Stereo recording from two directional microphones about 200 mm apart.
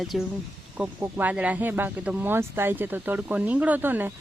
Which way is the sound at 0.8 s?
5° right (ahead or behind).